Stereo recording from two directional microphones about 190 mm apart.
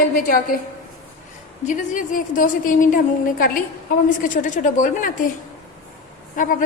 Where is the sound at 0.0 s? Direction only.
45° left (ahead or behind).